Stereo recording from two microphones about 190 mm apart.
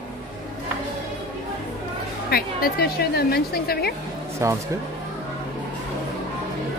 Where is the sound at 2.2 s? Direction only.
55° left (ahead or behind).